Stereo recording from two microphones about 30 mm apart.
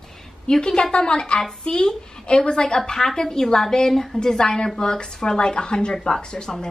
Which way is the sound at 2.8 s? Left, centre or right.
Centre.